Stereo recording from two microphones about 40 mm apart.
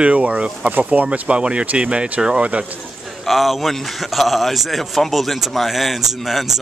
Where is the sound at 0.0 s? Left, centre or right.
Right.